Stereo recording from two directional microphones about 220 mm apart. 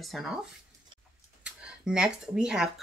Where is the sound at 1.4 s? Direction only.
5° right (ahead or behind).